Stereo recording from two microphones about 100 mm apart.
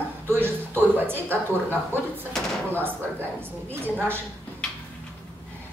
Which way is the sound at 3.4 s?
20° right (ahead or behind).